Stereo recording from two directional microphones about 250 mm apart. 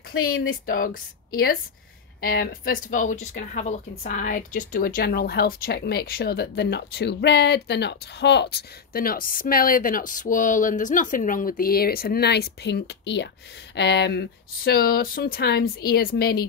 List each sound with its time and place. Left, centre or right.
0.1 s speech: left
0.7 s speech: left